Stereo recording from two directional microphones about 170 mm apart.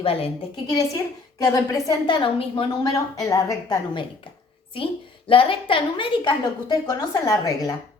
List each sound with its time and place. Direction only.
0.0 s a woman's voice: 35° left (ahead or behind)
0.7 s a woman's voice: 20° left (ahead or behind)
5.3 s a woman's voice: 30° left (ahead or behind)